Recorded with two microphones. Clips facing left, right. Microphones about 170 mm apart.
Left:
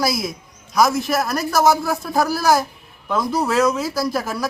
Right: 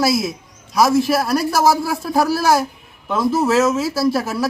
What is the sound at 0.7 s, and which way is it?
Speech, 30° right (ahead or behind).